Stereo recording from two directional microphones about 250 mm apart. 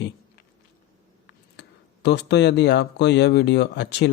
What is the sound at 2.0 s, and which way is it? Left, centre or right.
Speech, left.